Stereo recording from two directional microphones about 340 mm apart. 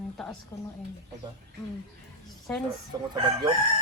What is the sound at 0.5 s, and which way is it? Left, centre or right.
Speech, centre.